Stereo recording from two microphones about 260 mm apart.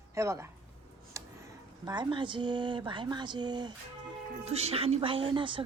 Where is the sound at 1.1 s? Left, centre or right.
Centre.